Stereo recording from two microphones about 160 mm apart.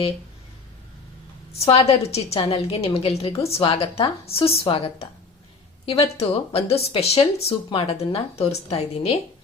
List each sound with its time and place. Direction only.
1.5 s speech: 40° left (ahead or behind)